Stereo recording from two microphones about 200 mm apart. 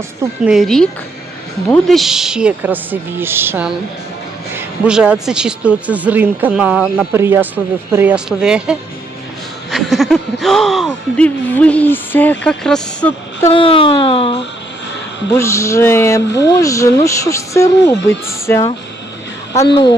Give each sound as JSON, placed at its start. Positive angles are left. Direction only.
{"t": 0.2, "sound": "a woman's voice", "side_deg": -5}
{"t": 13.5, "sound": "speech", "side_deg": 25}
{"t": 15.3, "sound": "speech", "side_deg": 15}